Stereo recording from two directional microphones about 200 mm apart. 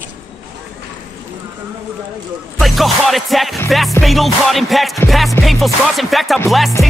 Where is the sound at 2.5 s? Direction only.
Centre (ahead or behind).